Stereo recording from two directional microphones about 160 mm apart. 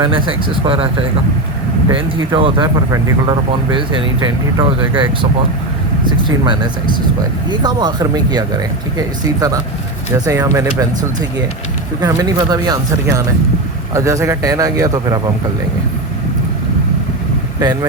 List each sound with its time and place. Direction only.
0.0 s speech: 30° right (ahead or behind)
1.9 s speech: 30° right (ahead or behind)
11.9 s speech: 25° right (ahead or behind)